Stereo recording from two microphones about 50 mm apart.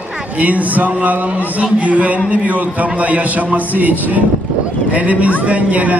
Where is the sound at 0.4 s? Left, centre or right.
Right.